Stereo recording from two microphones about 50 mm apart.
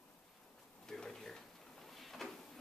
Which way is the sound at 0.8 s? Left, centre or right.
Centre.